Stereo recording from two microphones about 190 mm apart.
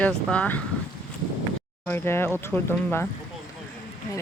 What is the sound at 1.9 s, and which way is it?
Speech, 10° left (ahead or behind).